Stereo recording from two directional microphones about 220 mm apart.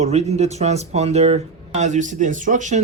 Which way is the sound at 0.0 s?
30° right (ahead or behind).